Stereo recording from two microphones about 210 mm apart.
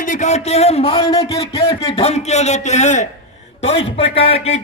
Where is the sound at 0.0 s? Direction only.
35° left (ahead or behind).